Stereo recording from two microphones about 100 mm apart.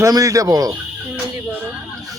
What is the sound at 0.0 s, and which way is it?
Speech, 35° right (ahead or behind).